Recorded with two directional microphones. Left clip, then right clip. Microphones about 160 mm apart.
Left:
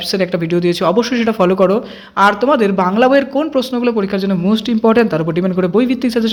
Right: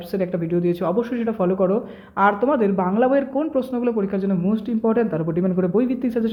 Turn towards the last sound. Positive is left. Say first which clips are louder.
# left 7 dB
turn(degrees=10)  # may be behind; listen again after turning